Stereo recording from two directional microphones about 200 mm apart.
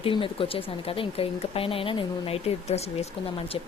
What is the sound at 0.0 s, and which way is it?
A woman's voice, 25° left (ahead or behind).